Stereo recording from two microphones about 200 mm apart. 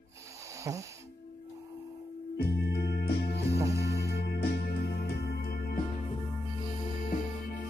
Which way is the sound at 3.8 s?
55° left (ahead or behind).